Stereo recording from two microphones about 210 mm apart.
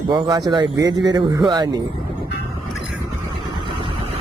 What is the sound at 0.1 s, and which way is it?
Speech, 20° right (ahead or behind).